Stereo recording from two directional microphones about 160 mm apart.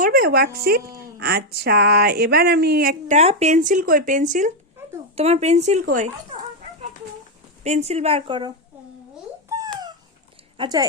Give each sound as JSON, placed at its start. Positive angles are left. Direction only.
{"t": 0.0, "sound": "speech", "side_deg": -65}
{"t": 3.1, "sound": "speech", "side_deg": -45}
{"t": 5.1, "sound": "speech", "side_deg": -40}
{"t": 7.6, "sound": "speech", "side_deg": -45}
{"t": 10.6, "sound": "speech", "side_deg": -25}